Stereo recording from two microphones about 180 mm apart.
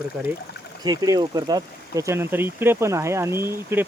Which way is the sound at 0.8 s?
20° right (ahead or behind).